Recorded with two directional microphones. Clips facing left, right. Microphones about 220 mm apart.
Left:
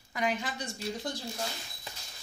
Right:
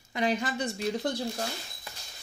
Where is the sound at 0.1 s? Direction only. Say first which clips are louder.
Right 4 dB; 30° right (ahead or behind).